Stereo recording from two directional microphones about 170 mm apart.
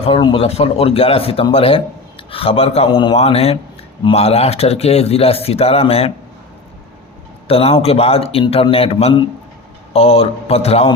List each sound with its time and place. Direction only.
0.0 s speech: 30° left (ahead or behind)
7.4 s speech: 35° left (ahead or behind)